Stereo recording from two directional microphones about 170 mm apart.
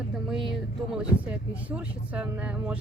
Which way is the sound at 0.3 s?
5° right (ahead or behind).